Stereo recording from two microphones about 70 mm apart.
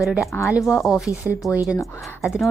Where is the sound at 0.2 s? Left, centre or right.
Left.